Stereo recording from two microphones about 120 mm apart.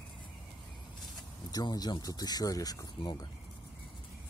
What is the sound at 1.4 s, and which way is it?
Speech, 30° left (ahead or behind).